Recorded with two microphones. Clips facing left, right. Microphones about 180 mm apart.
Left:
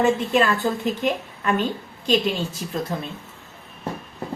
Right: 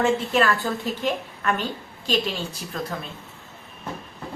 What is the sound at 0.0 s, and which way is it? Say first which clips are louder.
A woman's voice: left 2 dB; 20° left (ahead or behind).